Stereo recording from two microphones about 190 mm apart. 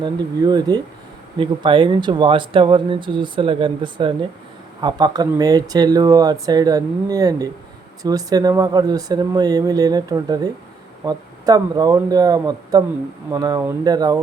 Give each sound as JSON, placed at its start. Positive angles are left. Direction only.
{"t": 0.0, "sound": "speech", "side_deg": -20}